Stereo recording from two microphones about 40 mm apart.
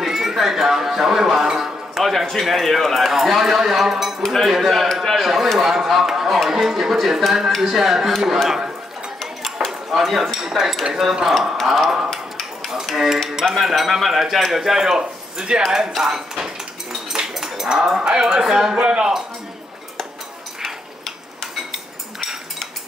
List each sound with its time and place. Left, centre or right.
0.0 s a sound: centre
1.6 s speech: centre
9.2 s mechanisms: centre
9.7 s speech: centre
12.1 s a sound: centre
12.9 s cutlery: centre
13.6 s speech: centre
17.1 s a sound: centre
17.6 s speech: centre
18.7 s speech: right